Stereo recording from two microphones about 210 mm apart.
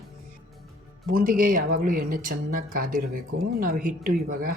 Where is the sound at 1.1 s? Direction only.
40° right (ahead or behind).